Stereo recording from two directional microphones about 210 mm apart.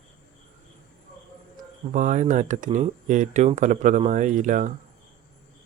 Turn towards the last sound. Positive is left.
turn(degrees=-35)  # may be behind; listen again after turning